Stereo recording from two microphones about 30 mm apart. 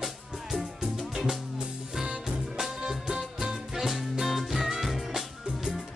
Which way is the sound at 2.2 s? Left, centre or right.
Centre.